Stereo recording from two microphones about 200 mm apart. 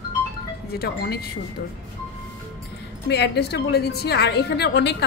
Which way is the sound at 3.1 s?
55° left (ahead or behind).